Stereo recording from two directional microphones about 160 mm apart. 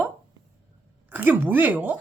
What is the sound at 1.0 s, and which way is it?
Speech, 10° right (ahead or behind).